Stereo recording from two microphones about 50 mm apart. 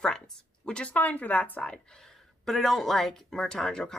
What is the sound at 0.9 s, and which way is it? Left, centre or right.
A woman's voice, left.